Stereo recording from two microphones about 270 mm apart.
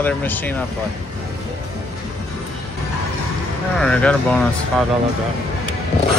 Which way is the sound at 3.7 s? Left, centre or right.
Centre.